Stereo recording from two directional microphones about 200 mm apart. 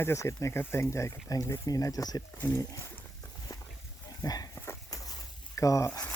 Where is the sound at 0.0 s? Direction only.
15° left (ahead or behind).